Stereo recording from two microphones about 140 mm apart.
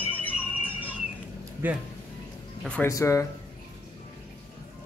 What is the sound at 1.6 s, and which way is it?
Speech, 10° right (ahead or behind).